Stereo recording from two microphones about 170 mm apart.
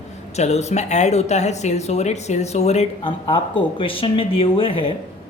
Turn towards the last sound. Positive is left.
turn(degrees=30)  # may be behind; listen again after turning